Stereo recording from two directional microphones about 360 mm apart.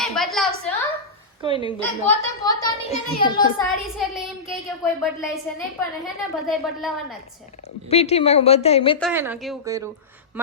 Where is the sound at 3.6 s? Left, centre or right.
Centre.